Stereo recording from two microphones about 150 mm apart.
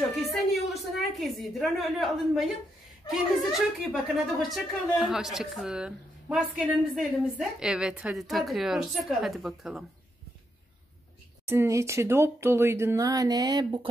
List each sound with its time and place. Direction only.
0.1 s a woman's voice: centre (ahead or behind)
11.4 s speech: 15° right (ahead or behind)